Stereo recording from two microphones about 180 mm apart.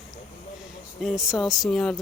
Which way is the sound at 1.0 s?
Centre (ahead or behind).